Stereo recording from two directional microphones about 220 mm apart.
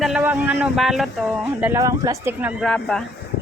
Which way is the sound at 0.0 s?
5° right (ahead or behind).